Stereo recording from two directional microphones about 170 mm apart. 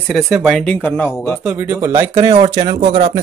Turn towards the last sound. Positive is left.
turn(degrees=-40)  # may be behind; listen again after turning